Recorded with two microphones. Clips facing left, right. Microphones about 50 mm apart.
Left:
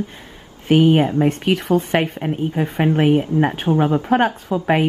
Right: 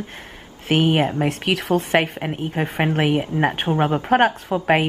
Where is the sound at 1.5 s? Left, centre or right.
Centre.